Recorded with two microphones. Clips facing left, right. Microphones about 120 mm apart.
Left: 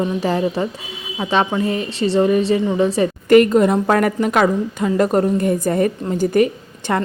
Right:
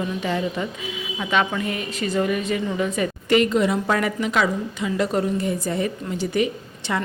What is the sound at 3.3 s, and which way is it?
A woman's voice, 50° left (ahead or behind).